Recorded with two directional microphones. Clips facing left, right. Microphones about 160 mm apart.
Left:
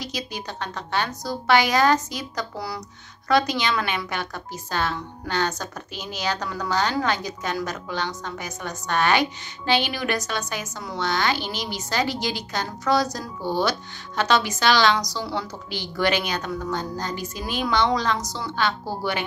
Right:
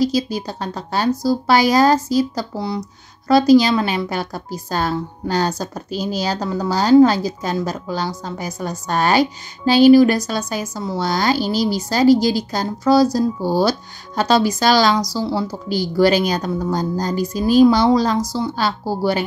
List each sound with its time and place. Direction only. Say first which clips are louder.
0.0 s a woman's voice: right 13 dB; 35° right (ahead or behind)